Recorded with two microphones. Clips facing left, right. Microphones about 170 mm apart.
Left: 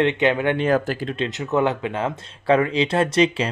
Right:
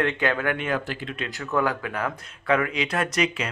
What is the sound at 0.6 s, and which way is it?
Speech, 40° left (ahead or behind).